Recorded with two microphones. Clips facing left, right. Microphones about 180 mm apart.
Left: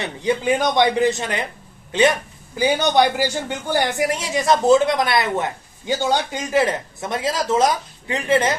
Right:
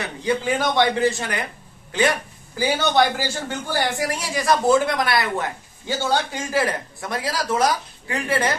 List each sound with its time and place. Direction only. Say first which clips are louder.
0.0 s a woman's voice: left 2 dB; 20° left (ahead or behind)